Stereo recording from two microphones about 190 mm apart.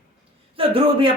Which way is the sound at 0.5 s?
30° right (ahead or behind).